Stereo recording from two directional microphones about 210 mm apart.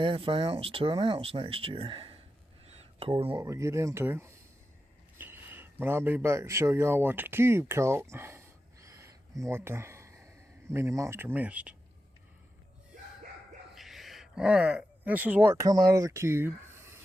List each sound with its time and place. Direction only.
0.0 s speech: 25° right (ahead or behind)
2.6 s a sound: 30° right (ahead or behind)
3.4 s a man's voice: 15° right (ahead or behind)
13.7 s speech: centre (ahead or behind)